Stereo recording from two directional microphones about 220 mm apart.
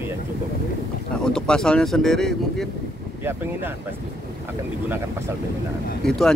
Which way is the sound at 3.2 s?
10° right (ahead or behind).